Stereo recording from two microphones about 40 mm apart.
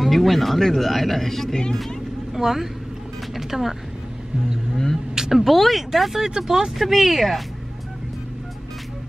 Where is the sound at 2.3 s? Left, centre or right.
Centre.